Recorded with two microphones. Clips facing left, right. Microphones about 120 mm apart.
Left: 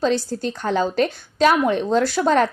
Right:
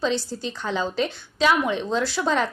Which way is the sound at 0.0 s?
45° left (ahead or behind).